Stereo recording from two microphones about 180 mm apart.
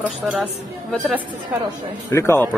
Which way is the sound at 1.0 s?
10° right (ahead or behind).